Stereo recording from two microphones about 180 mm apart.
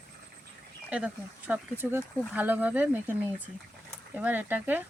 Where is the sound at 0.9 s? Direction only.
10° right (ahead or behind).